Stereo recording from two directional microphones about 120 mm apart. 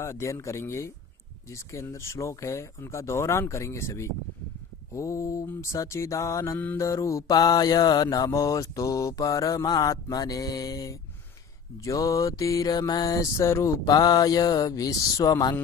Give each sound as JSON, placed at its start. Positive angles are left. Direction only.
{"t": 0.0, "sound": "mantra", "side_deg": 25}